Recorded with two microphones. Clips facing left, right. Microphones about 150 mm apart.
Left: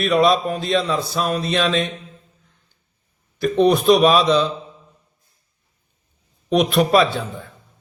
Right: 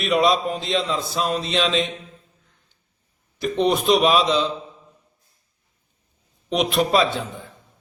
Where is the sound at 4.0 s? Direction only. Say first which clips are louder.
Left 3 dB; 20° right (ahead or behind).